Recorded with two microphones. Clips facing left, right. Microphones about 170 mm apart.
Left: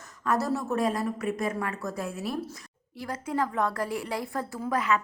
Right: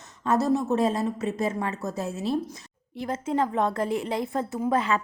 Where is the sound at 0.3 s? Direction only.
20° right (ahead or behind).